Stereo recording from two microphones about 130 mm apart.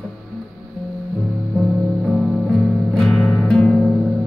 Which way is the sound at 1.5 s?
5° right (ahead or behind).